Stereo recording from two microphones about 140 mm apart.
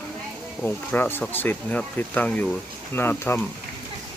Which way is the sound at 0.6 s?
15° left (ahead or behind).